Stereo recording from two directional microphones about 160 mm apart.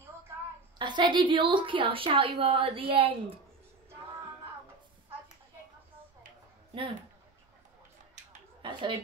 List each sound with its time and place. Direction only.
0.7 s a woman's voice: 30° right (ahead or behind)
8.6 s speech: 30° right (ahead or behind)